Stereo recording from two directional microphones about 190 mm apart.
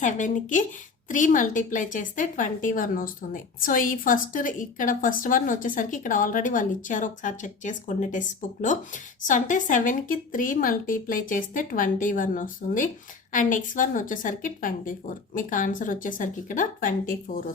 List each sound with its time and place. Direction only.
0.0 s a woman's voice: 40° left (ahead or behind)